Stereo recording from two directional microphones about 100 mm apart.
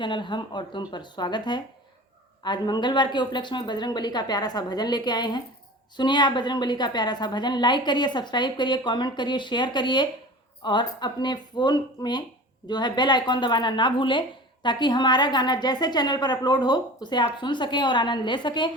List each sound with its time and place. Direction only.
0.0 s a woman's voice: 55° left (ahead or behind)